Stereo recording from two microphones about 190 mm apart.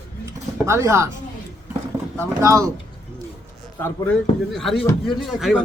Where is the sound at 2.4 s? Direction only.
15° right (ahead or behind).